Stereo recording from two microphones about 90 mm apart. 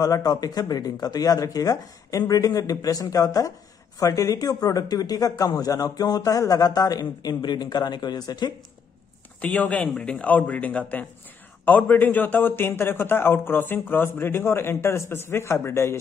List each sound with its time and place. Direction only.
0.0 s speech: 45° left (ahead or behind)
9.4 s a man's voice: 15° left (ahead or behind)